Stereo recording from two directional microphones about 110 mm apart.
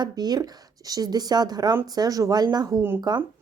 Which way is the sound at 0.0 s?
40° right (ahead or behind).